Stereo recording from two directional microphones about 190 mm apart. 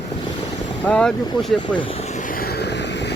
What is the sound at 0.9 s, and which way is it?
Speech, 5° left (ahead or behind).